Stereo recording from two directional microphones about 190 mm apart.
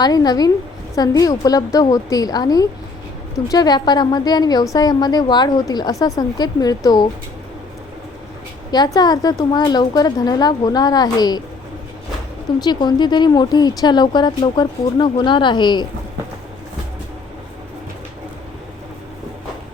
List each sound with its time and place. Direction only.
0.0 s a woman's voice: 20° left (ahead or behind)
8.7 s a woman's voice: 20° left (ahead or behind)
12.5 s a woman's voice: 20° left (ahead or behind)